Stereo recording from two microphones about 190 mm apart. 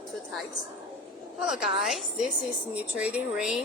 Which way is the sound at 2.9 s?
5° right (ahead or behind).